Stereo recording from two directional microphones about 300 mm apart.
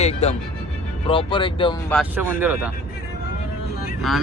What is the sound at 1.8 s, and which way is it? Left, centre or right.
Speech, centre.